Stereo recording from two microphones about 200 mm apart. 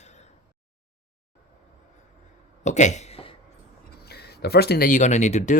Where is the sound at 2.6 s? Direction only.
35° left (ahead or behind).